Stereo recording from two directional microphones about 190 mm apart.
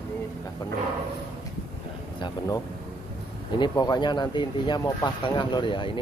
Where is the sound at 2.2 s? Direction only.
20° left (ahead or behind).